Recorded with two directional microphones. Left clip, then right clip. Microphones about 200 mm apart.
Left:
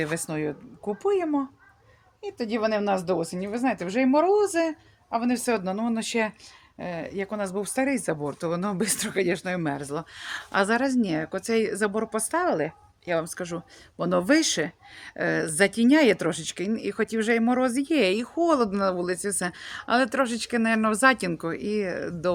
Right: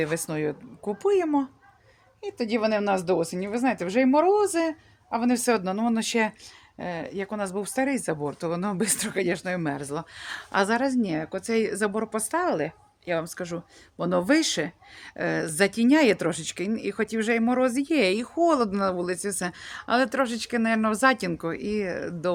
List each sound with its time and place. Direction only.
0.0 s speech: 15° right (ahead or behind)
1.0 s speech: 35° right (ahead or behind)
6.7 s speech: 20° right (ahead or behind); by 22.3 s centre (ahead or behind)